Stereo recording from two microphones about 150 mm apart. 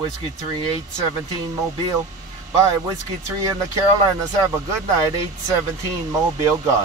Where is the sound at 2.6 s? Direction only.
20° right (ahead or behind).